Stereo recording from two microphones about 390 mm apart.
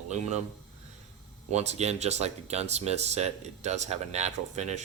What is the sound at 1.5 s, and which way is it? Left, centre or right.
Speech, centre.